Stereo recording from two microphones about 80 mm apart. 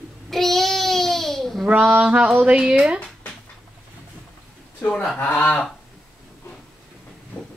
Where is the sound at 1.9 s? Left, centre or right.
Centre.